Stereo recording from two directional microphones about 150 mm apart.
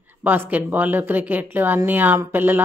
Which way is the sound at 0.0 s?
10° right (ahead or behind).